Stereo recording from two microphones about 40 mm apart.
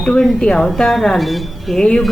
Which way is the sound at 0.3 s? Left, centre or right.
Centre.